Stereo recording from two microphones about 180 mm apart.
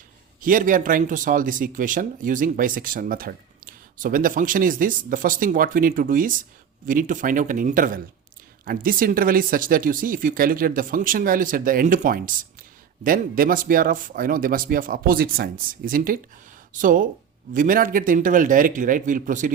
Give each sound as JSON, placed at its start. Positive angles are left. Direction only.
{"t": 0.4, "sound": "speech", "side_deg": -50}